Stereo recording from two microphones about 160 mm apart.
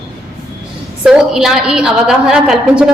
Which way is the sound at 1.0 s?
5° right (ahead or behind).